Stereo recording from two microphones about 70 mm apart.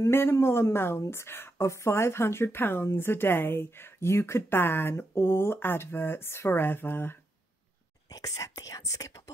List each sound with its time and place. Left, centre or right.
0.1 s speech: left
8.1 s speech: left